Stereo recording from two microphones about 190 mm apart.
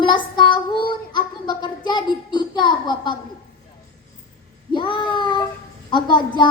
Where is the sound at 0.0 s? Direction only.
25° left (ahead or behind).